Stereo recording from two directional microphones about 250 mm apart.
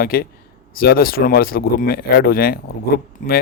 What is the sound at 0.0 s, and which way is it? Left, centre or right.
Speech, left.